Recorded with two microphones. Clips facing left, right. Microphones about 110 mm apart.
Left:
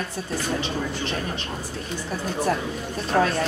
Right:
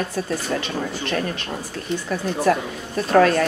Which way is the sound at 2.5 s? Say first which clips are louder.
Right 4 dB; 70° right (ahead or behind).